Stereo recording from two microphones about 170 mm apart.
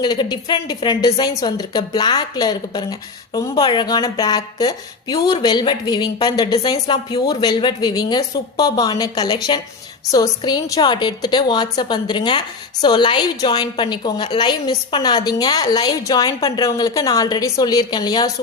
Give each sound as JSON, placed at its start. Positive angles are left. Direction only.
{"t": 0.0, "sound": "a woman's voice", "side_deg": 25}